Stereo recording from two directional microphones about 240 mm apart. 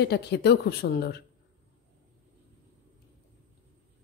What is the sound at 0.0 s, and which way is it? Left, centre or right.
Speech, left.